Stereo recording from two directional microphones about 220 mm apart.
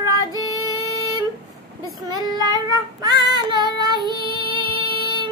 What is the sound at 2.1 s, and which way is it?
Child singing, 15° right (ahead or behind).